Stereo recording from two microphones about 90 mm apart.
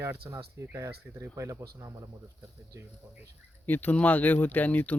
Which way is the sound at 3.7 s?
20° left (ahead or behind).